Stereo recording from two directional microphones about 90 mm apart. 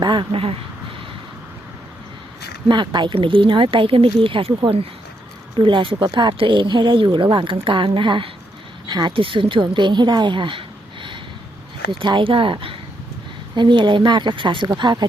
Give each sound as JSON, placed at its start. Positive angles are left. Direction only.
{"t": 0.0, "sound": "speech", "side_deg": -60}
{"t": 2.6, "sound": "speech", "side_deg": -60}
{"t": 5.5, "sound": "speech", "side_deg": -65}
{"t": 11.9, "sound": "speech", "side_deg": -65}
{"t": 13.6, "sound": "speech", "side_deg": -60}
{"t": 14.8, "sound": "speech", "side_deg": -55}